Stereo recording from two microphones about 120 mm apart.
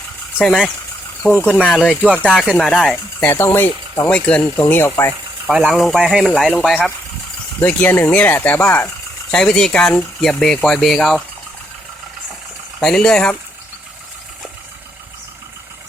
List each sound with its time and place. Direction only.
0.4 s speech: 10° left (ahead or behind)
2.9 s speech: 15° left (ahead or behind)
4.5 s speech: 20° left (ahead or behind)
5.5 s speech: 10° right (ahead or behind)
7.6 s speech: 15° left (ahead or behind)
9.3 s speech: 5° left (ahead or behind)
12.8 s speech: 5° left (ahead or behind)